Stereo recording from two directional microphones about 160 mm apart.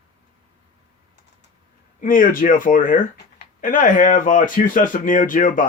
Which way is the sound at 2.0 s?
60° left (ahead or behind).